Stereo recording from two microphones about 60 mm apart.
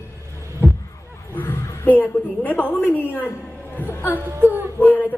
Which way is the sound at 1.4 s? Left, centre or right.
Left.